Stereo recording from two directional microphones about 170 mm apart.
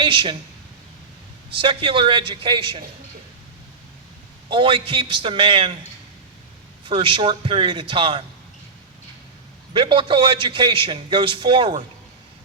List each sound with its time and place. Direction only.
0.0 s speech: 30° right (ahead or behind)
1.5 s a man's voice: 30° right (ahead or behind)
4.4 s a man's voice: 30° right (ahead or behind)
6.8 s a man's voice: 30° right (ahead or behind)
9.7 s a man's voice: 30° right (ahead or behind)